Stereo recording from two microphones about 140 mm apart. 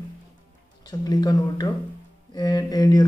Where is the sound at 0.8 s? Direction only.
30° left (ahead or behind).